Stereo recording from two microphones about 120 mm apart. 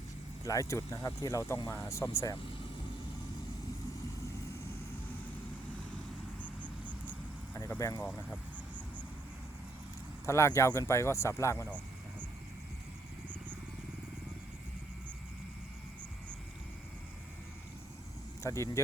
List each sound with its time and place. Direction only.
0.4 s speech: 30° left (ahead or behind)
6.4 s cricket: 10° left (ahead or behind)
7.5 s speech: 25° left (ahead or behind)
10.2 s speech: 25° left (ahead or behind)
18.4 s speech: 25° left (ahead or behind)